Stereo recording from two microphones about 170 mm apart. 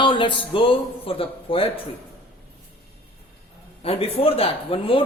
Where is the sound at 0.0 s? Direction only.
30° left (ahead or behind).